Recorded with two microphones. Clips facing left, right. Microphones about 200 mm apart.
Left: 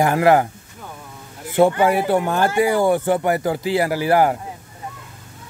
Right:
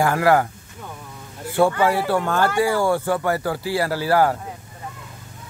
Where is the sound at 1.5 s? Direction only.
20° left (ahead or behind).